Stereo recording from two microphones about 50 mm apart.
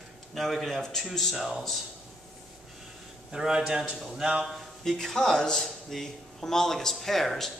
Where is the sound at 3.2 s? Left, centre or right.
Centre.